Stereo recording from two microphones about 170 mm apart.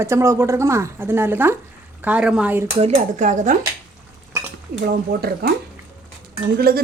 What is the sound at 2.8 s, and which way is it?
Speech, 45° right (ahead or behind).